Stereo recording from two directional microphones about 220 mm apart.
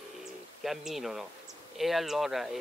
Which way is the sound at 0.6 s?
Centre (ahead or behind).